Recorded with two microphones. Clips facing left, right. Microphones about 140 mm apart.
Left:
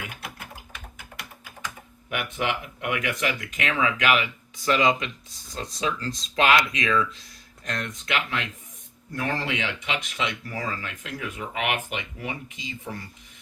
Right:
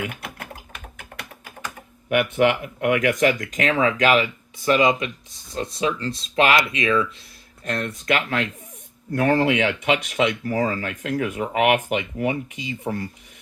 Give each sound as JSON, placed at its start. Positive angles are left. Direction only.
{"t": 0.3, "sound": "typing", "side_deg": -65}
{"t": 1.6, "sound": "speech", "side_deg": -60}
{"t": 4.7, "sound": "speech", "side_deg": -20}
{"t": 6.3, "sound": "speech", "side_deg": -30}